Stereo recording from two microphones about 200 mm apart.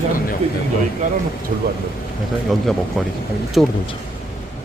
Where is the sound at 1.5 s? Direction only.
40° right (ahead or behind).